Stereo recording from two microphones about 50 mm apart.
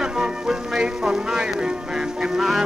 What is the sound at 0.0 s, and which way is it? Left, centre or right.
Music, centre.